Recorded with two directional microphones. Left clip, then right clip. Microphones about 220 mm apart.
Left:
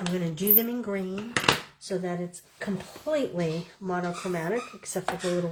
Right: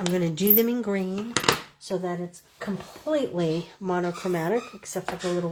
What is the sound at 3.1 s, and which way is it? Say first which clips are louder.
Speech: right 2 dB; 5° right (ahead or behind).